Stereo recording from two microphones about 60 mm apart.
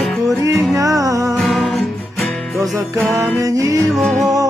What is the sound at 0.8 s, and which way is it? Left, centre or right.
Music, right.